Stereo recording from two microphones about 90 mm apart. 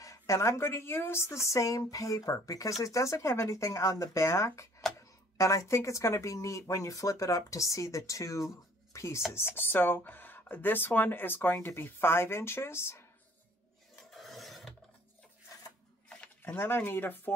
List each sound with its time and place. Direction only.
0.0 s a woman's voice: 35° left (ahead or behind)
14.1 s filing: centre (ahead or behind)
16.2 s speech: 20° left (ahead or behind)